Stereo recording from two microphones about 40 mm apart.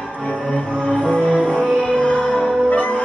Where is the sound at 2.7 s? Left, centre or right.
Left.